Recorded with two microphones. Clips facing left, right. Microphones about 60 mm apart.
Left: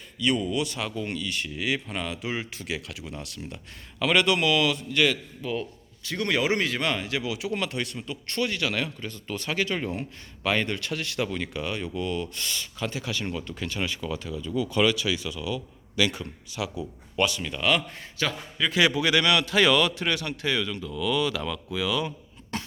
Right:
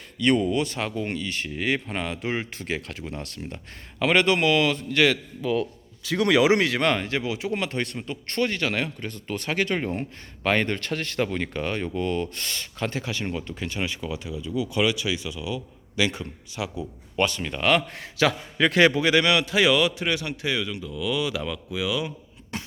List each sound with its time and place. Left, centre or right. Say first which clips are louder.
0.2 s speech: right 4 dB; right
4.9 s a man's voice: right 4 dB; right
5.1 s a man's voice: right 5 dB; right
17.2 s speech: right 1 dB; right
18.0 s a man's voice: right 7 dB; right
18.8 s a man's voice: right 3 dB; right; by 22.1 s centre
22.5 s beatboxing: left 1 dB; centre